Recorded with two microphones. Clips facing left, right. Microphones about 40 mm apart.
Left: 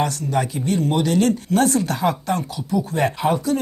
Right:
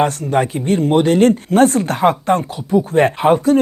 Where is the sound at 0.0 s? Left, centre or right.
Right.